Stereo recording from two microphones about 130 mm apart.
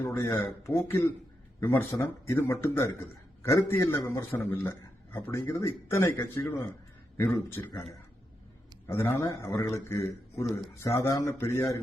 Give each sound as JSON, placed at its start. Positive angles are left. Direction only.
{"t": 0.0, "sound": "a man's voice", "side_deg": 20}
{"t": 8.9, "sound": "a man's voice", "side_deg": 20}